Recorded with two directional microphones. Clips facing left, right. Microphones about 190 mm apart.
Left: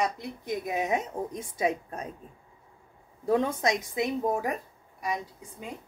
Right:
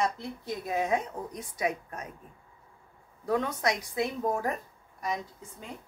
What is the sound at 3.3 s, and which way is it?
A woman's voice, 25° left (ahead or behind).